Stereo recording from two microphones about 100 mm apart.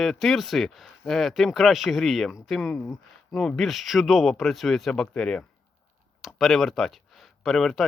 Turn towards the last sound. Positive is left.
turn(degrees=5)  # may be behind; listen again after turning